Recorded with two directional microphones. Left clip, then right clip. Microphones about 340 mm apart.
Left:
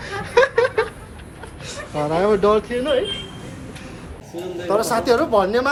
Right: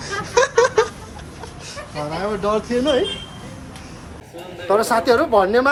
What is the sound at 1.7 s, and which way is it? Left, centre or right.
Speech, centre.